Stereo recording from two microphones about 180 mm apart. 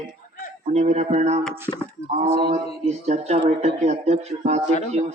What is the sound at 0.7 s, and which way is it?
Speech, 40° right (ahead or behind).